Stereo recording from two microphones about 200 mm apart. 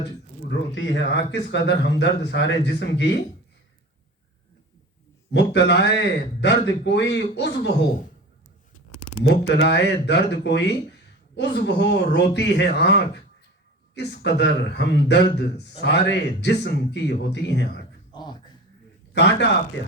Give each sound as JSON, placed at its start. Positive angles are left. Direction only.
{"t": 0.4, "sound": "speech", "side_deg": 60}
{"t": 5.3, "sound": "speech", "side_deg": 60}
{"t": 9.2, "sound": "speech", "side_deg": 60}
{"t": 18.1, "sound": "music", "side_deg": 20}
{"t": 19.1, "sound": "speech", "side_deg": 55}